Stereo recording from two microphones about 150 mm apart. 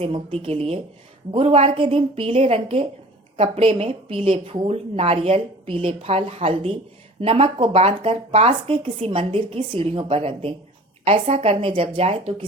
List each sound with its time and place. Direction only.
0.0 s a woman's voice: 35° right (ahead or behind)